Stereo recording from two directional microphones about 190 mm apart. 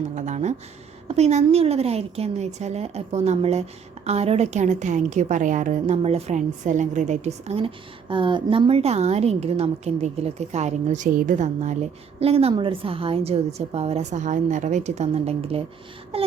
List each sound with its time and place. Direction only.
0.2 s a woman's voice: 40° right (ahead or behind)